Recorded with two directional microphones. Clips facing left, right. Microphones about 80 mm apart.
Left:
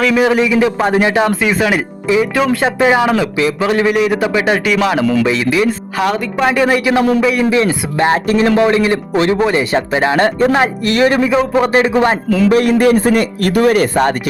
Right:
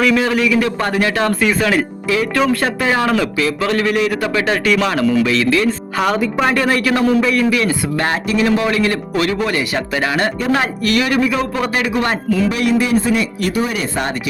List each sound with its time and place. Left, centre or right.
0.3 s speech: left
1.4 s a man's voice: centre
2.6 s a man's voice: centre
4.9 s speech: centre
5.6 s speech: centre
6.5 s a man's voice: centre
8.3 s speech: left
8.7 s speech: left
12.5 s speech: left